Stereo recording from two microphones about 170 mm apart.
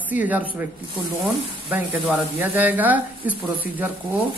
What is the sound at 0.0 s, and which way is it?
Speech, 10° right (ahead or behind).